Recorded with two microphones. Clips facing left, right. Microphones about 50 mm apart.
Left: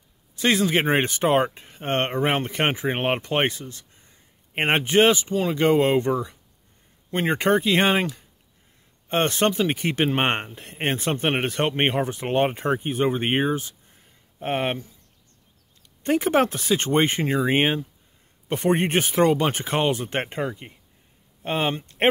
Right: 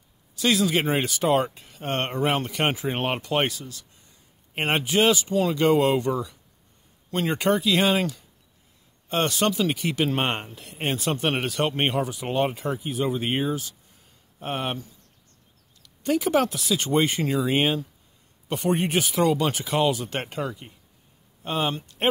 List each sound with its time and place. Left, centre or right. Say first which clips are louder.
0.4 s speech: left 1 dB; left
5.3 s speech: even; centre